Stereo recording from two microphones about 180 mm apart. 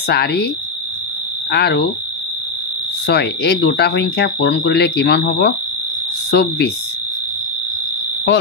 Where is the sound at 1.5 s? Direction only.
65° left (ahead or behind).